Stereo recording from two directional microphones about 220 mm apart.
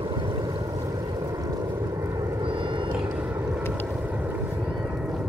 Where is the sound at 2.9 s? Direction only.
10° right (ahead or behind).